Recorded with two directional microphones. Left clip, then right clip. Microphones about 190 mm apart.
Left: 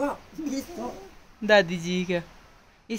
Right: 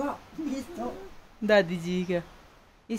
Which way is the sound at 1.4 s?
10° right (ahead or behind).